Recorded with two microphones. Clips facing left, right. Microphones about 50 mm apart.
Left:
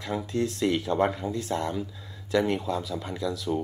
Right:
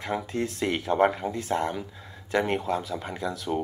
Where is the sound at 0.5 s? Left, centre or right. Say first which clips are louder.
Right 2 dB; right.